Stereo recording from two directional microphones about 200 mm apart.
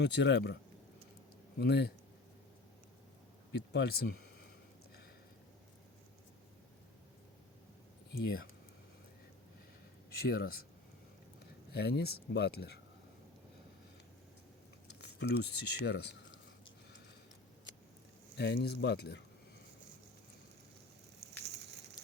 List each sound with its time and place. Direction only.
0.0 s speech: 60° left (ahead or behind)
3.7 s speech: 55° left (ahead or behind)
8.1 s speech: 50° left (ahead or behind)
10.1 s speech: 50° left (ahead or behind)
11.7 s speech: 55° left (ahead or behind)
14.8 s speech: 55° left (ahead or behind)
18.3 s speech: 55° left (ahead or behind)
21.2 s crushing: 55° right (ahead or behind)